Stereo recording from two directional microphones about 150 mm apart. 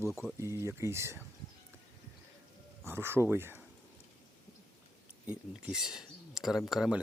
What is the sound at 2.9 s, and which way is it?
Speech, 15° right (ahead or behind).